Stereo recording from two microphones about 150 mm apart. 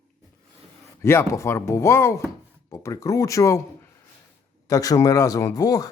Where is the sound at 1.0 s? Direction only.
20° left (ahead or behind).